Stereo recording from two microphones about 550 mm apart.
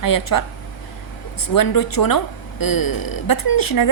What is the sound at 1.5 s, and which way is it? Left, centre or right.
A woman's voice, left.